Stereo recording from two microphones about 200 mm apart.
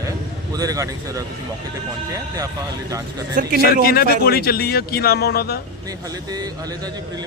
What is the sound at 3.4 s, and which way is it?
Speech, 40° right (ahead or behind).